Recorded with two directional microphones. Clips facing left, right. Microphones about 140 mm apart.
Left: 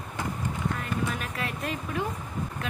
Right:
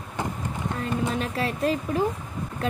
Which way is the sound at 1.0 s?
30° right (ahead or behind).